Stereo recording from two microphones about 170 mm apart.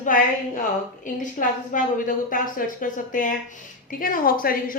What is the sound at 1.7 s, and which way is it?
A woman's voice, 50° left (ahead or behind).